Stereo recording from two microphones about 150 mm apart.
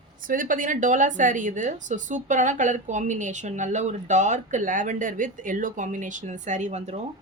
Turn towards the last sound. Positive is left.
turn(degrees=-50)  # may be behind; listen again after turning